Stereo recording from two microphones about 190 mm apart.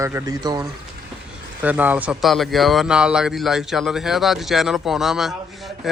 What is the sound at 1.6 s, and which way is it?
Speech, 10° right (ahead or behind).